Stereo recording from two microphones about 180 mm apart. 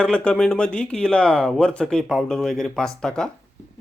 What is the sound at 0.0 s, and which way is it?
Speech, 5° left (ahead or behind).